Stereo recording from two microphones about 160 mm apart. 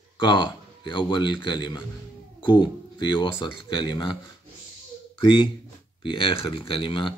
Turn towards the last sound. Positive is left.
turn(degrees=30)  # may be behind; listen again after turning